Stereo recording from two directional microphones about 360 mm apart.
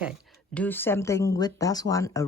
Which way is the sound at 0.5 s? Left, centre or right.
Centre.